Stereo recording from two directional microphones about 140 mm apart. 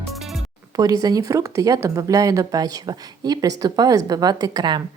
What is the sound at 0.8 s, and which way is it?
A woman's voice, 25° right (ahead or behind).